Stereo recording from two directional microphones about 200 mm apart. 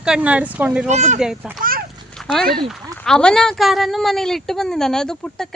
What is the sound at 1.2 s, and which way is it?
Speech, 5° right (ahead or behind).